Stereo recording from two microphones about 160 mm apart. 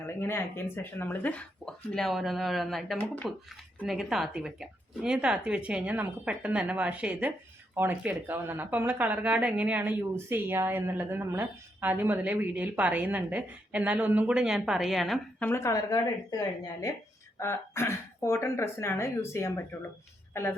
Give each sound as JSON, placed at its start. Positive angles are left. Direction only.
{"t": 0.0, "sound": "speech", "side_deg": 15}
{"t": 15.4, "sound": "speech", "side_deg": 15}
{"t": 17.3, "sound": "speech", "side_deg": 15}